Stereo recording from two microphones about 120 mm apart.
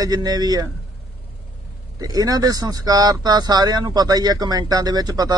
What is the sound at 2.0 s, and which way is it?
Speech, 30° right (ahead or behind).